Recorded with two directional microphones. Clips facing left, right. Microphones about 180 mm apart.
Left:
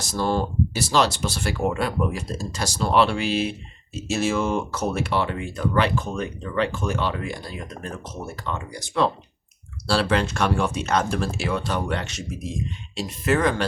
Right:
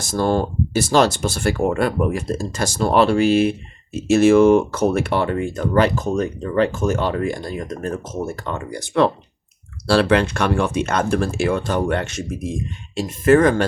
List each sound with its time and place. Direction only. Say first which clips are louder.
0.0 s speech: right 5 dB; 50° right (ahead or behind)